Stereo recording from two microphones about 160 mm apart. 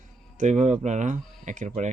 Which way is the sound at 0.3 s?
45° right (ahead or behind).